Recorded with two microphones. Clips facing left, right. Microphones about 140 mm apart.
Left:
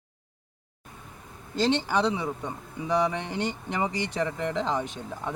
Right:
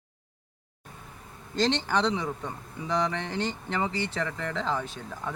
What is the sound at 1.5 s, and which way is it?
A man's voice, 10° left (ahead or behind).